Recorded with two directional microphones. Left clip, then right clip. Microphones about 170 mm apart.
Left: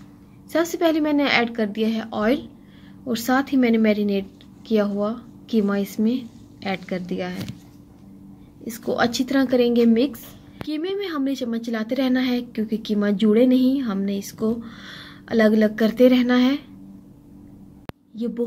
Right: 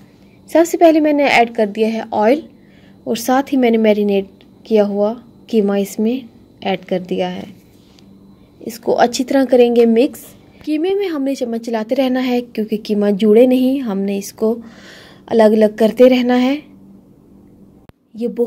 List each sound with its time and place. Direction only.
0.5 s a woman's voice: 45° right (ahead or behind)
8.6 s a woman's voice: 45° right (ahead or behind)
18.1 s speech: 45° right (ahead or behind)